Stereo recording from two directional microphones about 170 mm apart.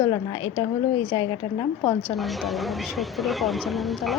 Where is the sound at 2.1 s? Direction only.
Centre (ahead or behind).